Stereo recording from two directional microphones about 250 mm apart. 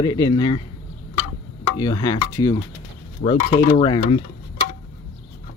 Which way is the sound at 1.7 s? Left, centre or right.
Centre.